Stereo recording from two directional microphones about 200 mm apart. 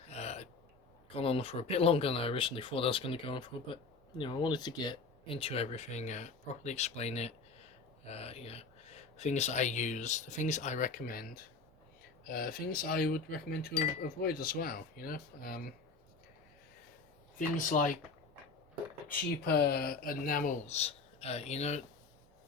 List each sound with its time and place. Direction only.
0.1 s gasp: 35° left (ahead or behind)
1.1 s speech: 30° left (ahead or behind); by 11.3 s 45° left (ahead or behind)
12.3 s speech: 50° left (ahead or behind)
17.3 s speech: 40° left (ahead or behind)
19.0 s speech: 50° left (ahead or behind); by 21.8 s 35° left (ahead or behind)